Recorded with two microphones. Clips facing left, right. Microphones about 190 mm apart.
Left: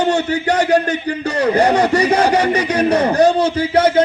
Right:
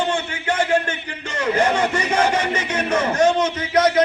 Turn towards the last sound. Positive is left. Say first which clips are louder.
# left 4 dB
turn(degrees=30)  # may be behind; listen again after turning